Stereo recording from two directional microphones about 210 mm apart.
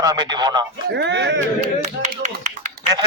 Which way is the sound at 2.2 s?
35° right (ahead or behind).